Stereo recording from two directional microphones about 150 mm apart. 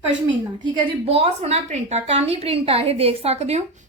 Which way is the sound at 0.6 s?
35° right (ahead or behind).